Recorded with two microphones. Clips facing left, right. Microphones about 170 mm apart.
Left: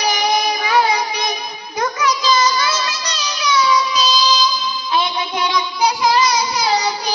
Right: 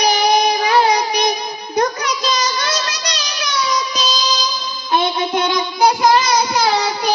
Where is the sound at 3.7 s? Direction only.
45° right (ahead or behind).